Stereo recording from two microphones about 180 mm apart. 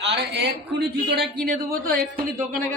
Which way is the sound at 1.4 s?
55° right (ahead or behind).